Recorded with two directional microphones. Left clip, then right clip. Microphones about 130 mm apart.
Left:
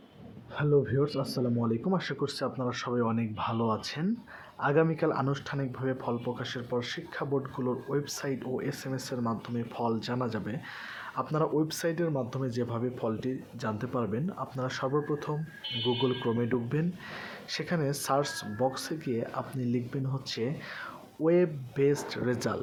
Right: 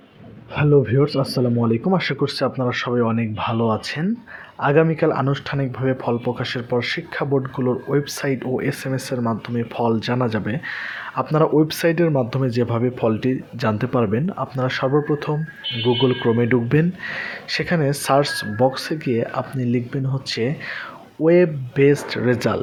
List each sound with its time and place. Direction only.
0.5 s speech: 35° right (ahead or behind)
17.1 s speech: 25° right (ahead or behind)